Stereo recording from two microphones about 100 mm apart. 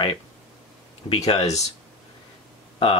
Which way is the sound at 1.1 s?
80° left.